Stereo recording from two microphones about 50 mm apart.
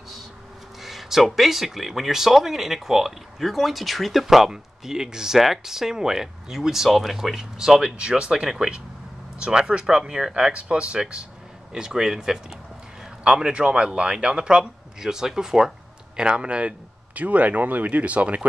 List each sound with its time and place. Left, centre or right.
0.8 s speech: centre
7.7 s a man's voice: centre